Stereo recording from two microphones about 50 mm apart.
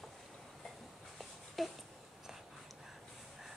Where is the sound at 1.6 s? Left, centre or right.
Centre.